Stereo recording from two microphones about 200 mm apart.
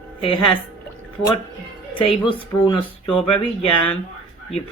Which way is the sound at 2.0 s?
25° left (ahead or behind).